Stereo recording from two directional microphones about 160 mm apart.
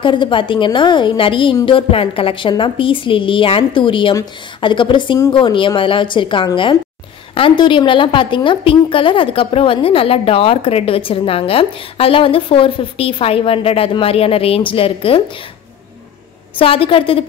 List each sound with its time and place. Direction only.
0.0 s a woman's voice: 30° left (ahead or behind)
16.5 s a woman's voice: 35° left (ahead or behind)